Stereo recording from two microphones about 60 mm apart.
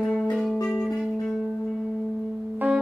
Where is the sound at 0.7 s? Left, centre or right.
Centre.